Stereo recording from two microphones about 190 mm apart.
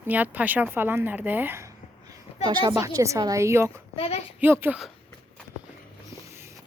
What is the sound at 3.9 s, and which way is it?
Speech, 30° left (ahead or behind).